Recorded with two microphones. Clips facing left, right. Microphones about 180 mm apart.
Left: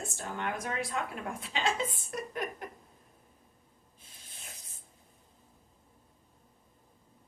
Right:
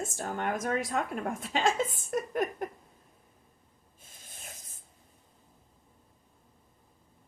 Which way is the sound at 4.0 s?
50° right (ahead or behind).